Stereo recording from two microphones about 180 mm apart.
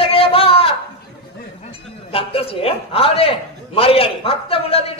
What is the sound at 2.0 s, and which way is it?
A man's voice, 30° left (ahead or behind).